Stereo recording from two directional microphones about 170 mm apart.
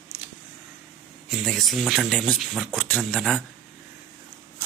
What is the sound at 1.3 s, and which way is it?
Speech, centre (ahead or behind).